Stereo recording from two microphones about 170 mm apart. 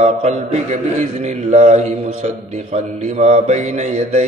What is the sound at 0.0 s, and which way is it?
A man's voice, 40° right (ahead or behind).